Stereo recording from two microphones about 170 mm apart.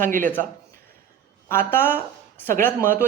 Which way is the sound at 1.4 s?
15° left (ahead or behind).